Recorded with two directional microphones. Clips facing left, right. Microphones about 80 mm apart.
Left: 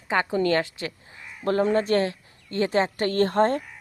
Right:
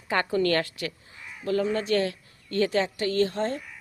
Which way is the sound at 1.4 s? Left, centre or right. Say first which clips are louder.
Left 4 dB; left.